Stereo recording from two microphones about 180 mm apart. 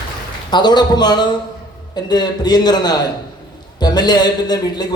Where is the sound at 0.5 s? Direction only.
25° left (ahead or behind).